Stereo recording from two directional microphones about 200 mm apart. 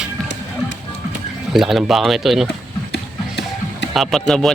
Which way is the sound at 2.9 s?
55° left (ahead or behind).